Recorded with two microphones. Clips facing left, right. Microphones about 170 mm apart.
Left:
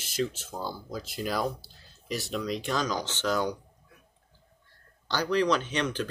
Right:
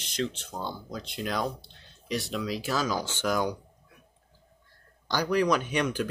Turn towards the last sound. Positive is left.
turn(degrees=-10)  # may be behind; listen again after turning